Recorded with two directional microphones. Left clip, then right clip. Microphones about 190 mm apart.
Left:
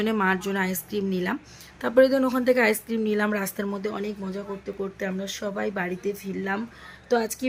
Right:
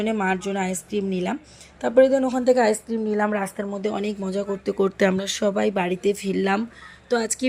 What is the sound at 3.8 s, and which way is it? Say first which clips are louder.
Speech: right 4 dB; 15° right (ahead or behind).